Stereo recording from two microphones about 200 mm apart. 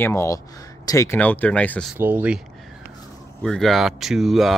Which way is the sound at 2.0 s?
10° right (ahead or behind).